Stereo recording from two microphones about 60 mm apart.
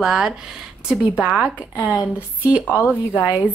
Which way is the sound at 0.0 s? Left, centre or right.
Centre.